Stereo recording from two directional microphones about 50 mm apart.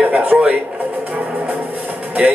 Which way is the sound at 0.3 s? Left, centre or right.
Centre.